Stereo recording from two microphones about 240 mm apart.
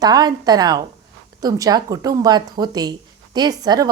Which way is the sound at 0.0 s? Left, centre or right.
Centre.